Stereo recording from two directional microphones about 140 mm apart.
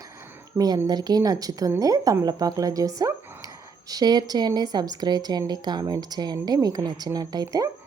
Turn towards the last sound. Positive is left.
turn(degrees=-25)  # may be behind; listen again after turning